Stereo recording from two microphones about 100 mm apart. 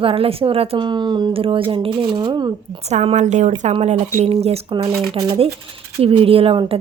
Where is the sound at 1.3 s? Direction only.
65° right (ahead or behind); by 2.5 s 45° right (ahead or behind).